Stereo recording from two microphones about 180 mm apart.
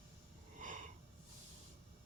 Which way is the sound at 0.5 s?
45° right (ahead or behind).